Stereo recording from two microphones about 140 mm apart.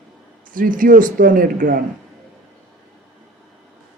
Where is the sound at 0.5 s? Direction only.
75° right (ahead or behind).